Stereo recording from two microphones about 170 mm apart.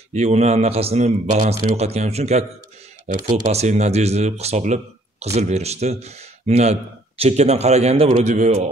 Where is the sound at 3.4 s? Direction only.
40° right (ahead or behind).